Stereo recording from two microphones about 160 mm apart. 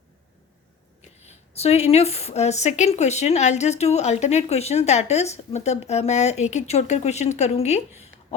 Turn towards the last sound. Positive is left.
turn(degrees=45)  # may be behind; listen again after turning